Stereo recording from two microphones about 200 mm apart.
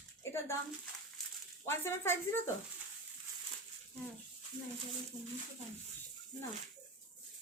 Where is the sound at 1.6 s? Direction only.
10° left (ahead or behind).